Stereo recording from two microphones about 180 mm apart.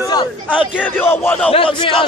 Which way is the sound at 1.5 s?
30° left (ahead or behind).